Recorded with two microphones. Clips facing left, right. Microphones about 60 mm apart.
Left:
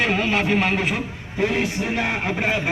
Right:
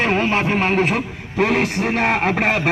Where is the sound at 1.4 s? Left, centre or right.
Right.